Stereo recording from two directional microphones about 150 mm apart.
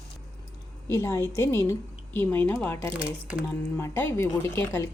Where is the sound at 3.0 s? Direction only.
10° right (ahead or behind).